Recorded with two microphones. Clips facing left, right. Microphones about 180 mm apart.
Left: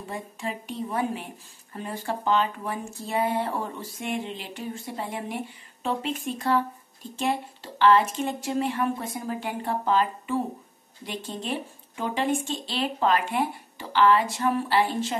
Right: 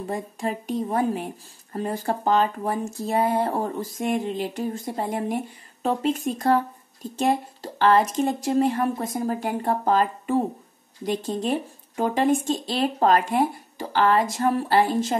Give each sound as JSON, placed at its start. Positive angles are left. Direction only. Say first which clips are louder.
{"t": 0.0, "sound": "a woman's voice", "louder": "right 6 dB", "side_deg": -40}